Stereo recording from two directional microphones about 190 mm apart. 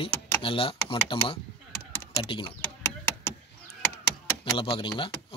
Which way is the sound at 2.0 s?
25° left (ahead or behind).